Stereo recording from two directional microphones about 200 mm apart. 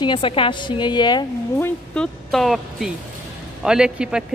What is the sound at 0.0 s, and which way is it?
A woman's voice, 25° left (ahead or behind).